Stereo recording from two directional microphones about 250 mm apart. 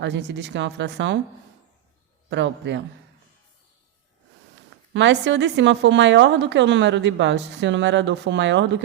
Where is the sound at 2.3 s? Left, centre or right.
Right.